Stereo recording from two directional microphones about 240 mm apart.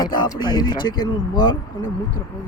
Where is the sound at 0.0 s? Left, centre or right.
Centre.